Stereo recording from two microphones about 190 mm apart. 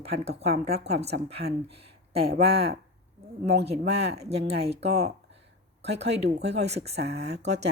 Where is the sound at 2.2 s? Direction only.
55° right (ahead or behind).